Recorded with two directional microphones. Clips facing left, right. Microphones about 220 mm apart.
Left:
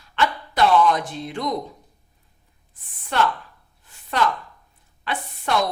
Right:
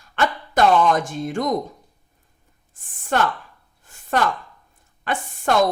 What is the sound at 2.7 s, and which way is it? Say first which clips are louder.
Speech: right 2 dB; 45° right (ahead or behind).